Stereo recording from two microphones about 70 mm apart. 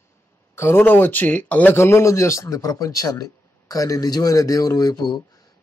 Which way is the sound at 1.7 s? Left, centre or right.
Left.